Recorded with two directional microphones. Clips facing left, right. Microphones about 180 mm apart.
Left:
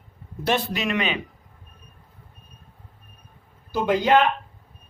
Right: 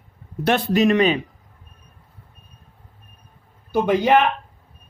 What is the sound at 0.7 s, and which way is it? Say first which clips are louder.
Speech: right 9 dB; 40° right (ahead or behind).